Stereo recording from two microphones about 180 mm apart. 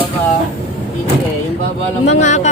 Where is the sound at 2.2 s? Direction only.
40° left (ahead or behind).